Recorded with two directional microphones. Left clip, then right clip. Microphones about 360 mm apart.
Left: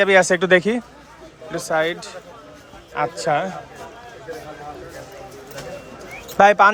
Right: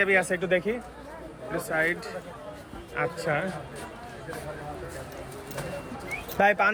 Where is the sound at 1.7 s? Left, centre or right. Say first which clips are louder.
Left 6 dB; centre.